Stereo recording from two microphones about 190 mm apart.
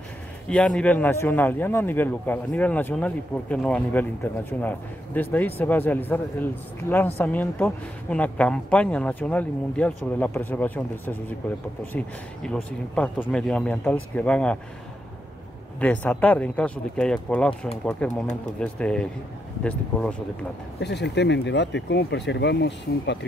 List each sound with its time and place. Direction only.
0.5 s a man's voice: 5° left (ahead or behind)
12.4 s speech: 5° left (ahead or behind)
15.8 s a man's voice: 10° left (ahead or behind)
20.8 s speech: 65° left (ahead or behind)